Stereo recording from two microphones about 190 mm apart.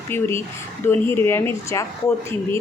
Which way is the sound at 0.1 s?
15° left (ahead or behind).